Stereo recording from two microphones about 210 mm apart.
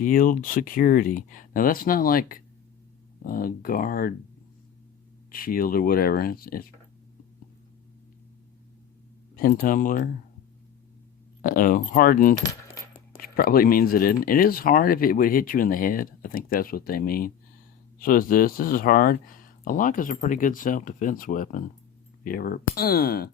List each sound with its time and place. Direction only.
0.0 s speech: 40° left (ahead or behind)
5.3 s speech: 45° left (ahead or behind)
9.3 s speech: 40° left (ahead or behind)
11.4 s speech: 40° left (ahead or behind)